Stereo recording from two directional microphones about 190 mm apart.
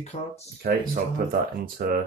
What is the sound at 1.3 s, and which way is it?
Speech, 55° right (ahead or behind).